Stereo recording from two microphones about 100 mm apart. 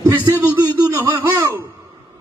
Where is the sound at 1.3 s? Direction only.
25° right (ahead or behind).